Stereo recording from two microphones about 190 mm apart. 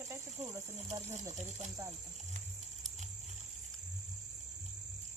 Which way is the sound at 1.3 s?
35° right (ahead or behind).